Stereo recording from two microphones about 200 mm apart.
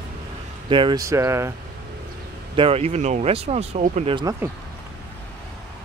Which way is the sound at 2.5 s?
30° right (ahead or behind).